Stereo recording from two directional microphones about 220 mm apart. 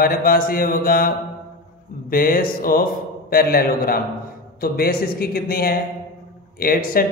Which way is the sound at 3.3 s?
45° left (ahead or behind).